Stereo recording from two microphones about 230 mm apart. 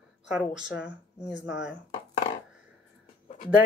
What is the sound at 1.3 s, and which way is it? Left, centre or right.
Speech, left.